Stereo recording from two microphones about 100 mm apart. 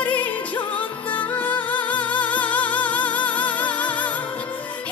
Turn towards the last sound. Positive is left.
turn(degrees=15)  # may be behind; listen again after turning